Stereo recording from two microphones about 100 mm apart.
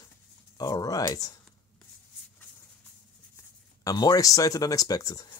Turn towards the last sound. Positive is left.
turn(degrees=35)  # may be behind; listen again after turning